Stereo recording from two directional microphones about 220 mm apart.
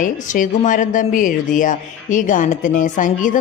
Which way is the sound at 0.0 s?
35° left (ahead or behind).